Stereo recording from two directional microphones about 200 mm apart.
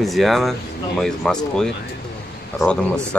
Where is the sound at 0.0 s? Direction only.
Centre (ahead or behind).